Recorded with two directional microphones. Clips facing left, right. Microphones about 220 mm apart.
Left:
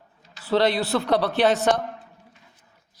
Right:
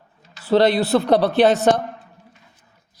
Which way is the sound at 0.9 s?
45° right (ahead or behind).